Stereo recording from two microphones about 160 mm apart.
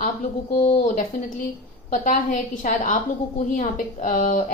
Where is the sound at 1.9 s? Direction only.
50° left (ahead or behind).